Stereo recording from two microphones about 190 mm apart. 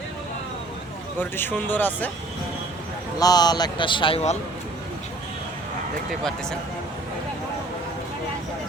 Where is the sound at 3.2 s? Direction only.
20° left (ahead or behind).